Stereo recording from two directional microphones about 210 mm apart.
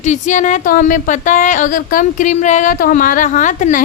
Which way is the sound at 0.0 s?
35° left (ahead or behind).